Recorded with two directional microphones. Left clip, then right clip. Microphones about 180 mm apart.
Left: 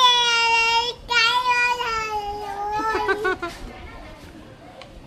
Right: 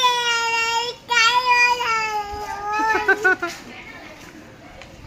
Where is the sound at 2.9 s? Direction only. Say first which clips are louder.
Right 5 dB; 15° right (ahead or behind).